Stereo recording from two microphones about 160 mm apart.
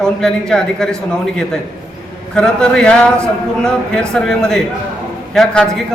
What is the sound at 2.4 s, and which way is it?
A man's voice, 5° left (ahead or behind).